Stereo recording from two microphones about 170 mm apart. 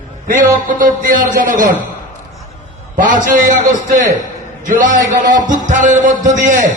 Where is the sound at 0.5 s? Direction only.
50° right (ahead or behind).